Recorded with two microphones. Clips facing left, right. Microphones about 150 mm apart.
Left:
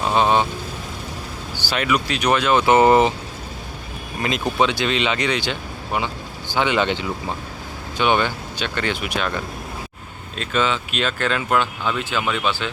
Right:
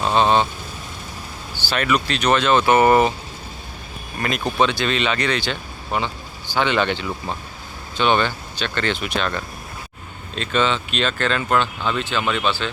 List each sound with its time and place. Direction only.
0.0 s vehicle: 10° left (ahead or behind)
1.6 s speech: 15° left (ahead or behind)
4.2 s speech: 20° left (ahead or behind)